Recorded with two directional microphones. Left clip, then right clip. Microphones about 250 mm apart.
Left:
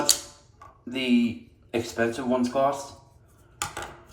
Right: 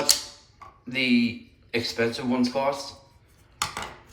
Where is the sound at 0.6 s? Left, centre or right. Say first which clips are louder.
Right 4 dB; centre.